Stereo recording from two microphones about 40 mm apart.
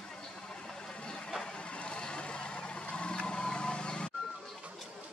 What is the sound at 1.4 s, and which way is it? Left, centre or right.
Vehicle, left.